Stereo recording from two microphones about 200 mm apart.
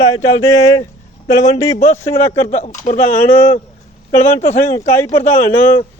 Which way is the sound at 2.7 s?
40° left (ahead or behind).